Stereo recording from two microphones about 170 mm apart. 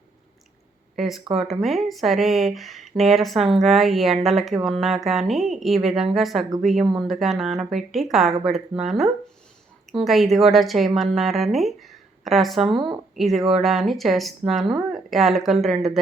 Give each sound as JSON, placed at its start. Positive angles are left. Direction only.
{"t": 0.9, "sound": "speech", "side_deg": 0}
{"t": 1.3, "sound": "speech", "side_deg": -35}
{"t": 1.6, "sound": "speech", "side_deg": 0}